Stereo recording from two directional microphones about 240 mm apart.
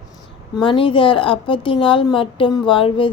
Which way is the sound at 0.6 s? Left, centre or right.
Left.